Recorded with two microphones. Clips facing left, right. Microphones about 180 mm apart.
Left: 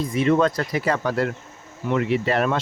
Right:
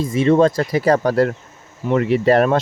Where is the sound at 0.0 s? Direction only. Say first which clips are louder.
Right 5 dB; 30° right (ahead or behind).